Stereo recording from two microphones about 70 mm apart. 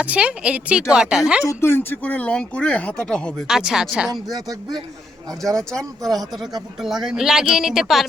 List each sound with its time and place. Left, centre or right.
0.0 s a woman's voice: centre
1.5 s speech: left; by 3.3 s centre
3.4 s a woman's voice: centre
4.4 s speech: right
5.4 s speech: centre